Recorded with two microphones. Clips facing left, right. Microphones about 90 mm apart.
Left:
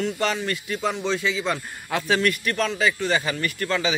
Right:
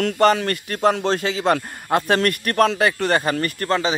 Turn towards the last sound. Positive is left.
turn(degrees=-40)  # may be behind; listen again after turning